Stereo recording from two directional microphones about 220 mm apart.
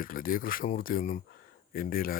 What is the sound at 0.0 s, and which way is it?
Speech, 40° left (ahead or behind).